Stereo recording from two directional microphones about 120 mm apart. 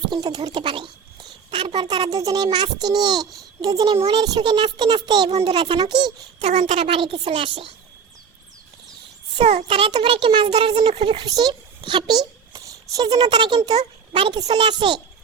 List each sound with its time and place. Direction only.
0.1 s a child's voice: 35° right (ahead or behind)
6.7 s speech: 55° right (ahead or behind)
9.3 s a child's voice: 50° right (ahead or behind)
11.2 s a child's voice: 35° right (ahead or behind)